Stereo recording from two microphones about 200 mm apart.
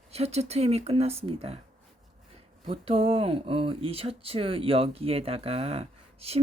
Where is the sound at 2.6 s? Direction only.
30° right (ahead or behind).